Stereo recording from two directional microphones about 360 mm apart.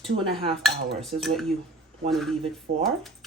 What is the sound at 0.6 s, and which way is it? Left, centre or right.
Speech, centre.